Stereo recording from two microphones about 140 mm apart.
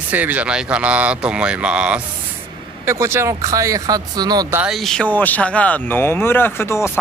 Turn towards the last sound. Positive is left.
turn(degrees=20)  # may be behind; listen again after turning